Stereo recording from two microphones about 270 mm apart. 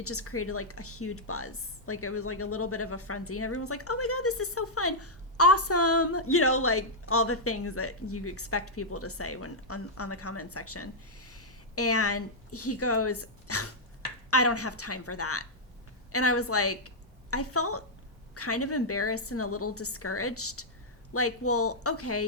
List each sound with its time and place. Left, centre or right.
0.0 s speech: left